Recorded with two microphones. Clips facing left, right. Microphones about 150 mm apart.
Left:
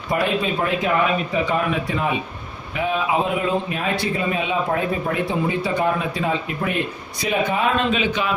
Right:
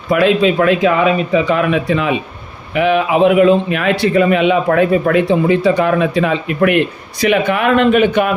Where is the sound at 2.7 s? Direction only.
80° right.